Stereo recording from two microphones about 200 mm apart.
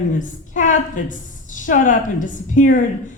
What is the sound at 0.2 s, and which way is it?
A woman's voice, 40° left (ahead or behind).